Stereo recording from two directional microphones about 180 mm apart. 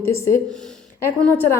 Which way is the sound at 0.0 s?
15° left (ahead or behind).